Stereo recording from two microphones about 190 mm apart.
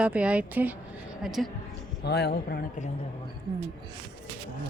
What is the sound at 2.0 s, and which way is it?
Speech, 60° left (ahead or behind).